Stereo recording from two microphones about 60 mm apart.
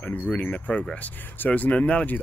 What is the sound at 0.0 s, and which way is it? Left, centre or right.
Speech, left.